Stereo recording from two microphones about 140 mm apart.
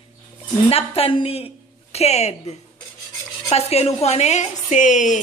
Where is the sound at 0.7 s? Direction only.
45° left (ahead or behind).